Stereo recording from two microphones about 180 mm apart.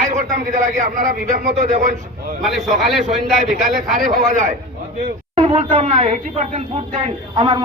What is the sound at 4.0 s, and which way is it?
A man's voice, 45° right (ahead or behind).